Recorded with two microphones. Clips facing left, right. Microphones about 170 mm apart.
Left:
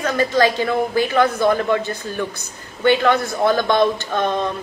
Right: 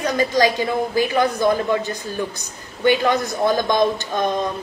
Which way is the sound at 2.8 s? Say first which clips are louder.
Left 1 dB; 15° right (ahead or behind).